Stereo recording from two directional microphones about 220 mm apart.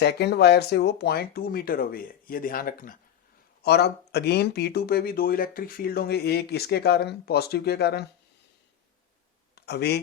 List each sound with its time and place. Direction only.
0.0 s speech: 50° left (ahead or behind)
9.6 s speech: 50° left (ahead or behind)